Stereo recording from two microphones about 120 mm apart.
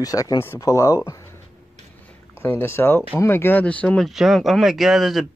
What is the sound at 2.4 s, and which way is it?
Speech, 20° left (ahead or behind).